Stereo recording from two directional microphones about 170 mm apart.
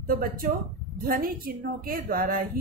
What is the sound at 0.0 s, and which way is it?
Speech, 60° right (ahead or behind).